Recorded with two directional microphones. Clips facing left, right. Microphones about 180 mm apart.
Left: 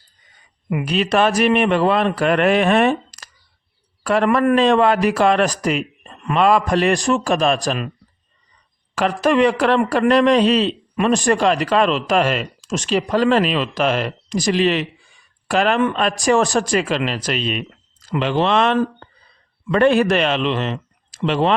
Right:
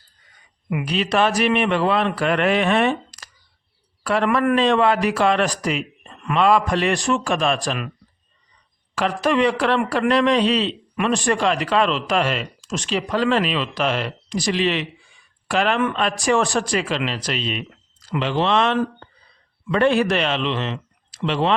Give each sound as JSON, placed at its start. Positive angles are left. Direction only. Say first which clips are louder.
{"t": 0.7, "sound": "a man's voice", "louder": "left 3 dB", "side_deg": 40}
{"t": 9.0, "sound": "speech", "louder": "left 3 dB", "side_deg": 50}